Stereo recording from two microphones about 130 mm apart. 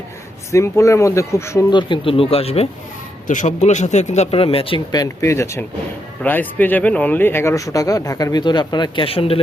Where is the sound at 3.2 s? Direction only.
75° left (ahead or behind).